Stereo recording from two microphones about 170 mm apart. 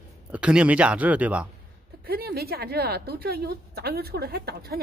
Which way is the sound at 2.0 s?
65° right (ahead or behind).